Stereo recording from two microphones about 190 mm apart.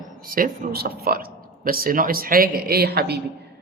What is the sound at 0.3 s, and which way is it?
A woman's voice, 50° right (ahead or behind).